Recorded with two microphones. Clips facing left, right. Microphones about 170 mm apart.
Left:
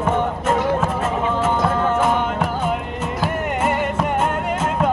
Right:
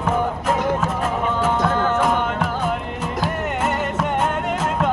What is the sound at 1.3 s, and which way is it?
Music, 5° left (ahead or behind).